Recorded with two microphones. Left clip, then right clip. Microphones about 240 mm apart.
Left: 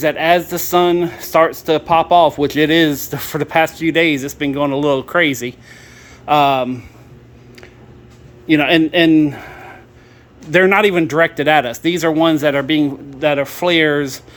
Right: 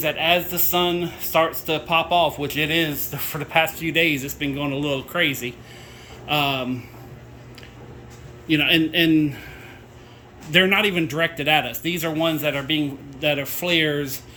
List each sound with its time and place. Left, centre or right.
0.0 s speech: left
8.4 s speech: centre